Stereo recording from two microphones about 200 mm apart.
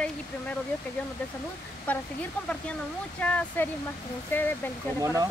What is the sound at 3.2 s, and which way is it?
Speech, 10° left (ahead or behind).